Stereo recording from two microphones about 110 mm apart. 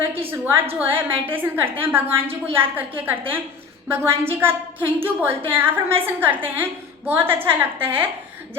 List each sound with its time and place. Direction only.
0.1 s a woman's voice: 20° right (ahead or behind)